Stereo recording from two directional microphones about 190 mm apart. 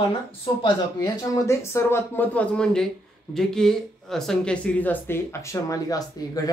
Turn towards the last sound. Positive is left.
turn(degrees=20)  # may be behind; listen again after turning